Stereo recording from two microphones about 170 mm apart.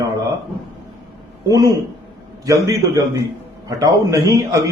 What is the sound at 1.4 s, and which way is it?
A man's voice, 20° right (ahead or behind).